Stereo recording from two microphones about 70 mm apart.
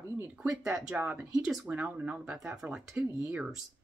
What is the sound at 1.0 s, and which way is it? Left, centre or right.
Speech, right.